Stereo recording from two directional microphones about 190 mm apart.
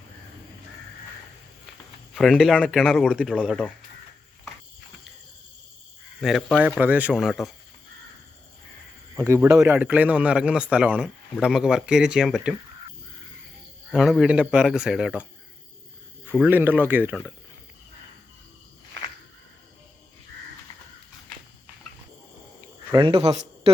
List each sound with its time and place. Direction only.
2.1 s a man's voice: centre (ahead or behind)
6.2 s a man's voice: centre (ahead or behind)
9.2 s a man's voice: 15° right (ahead or behind)
13.9 s a man's voice: centre (ahead or behind)
16.4 s speech: 10° right (ahead or behind)
22.9 s speech: 25° right (ahead or behind)